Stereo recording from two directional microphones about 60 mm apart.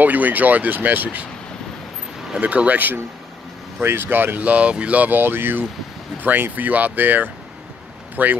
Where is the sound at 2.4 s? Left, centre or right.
Right.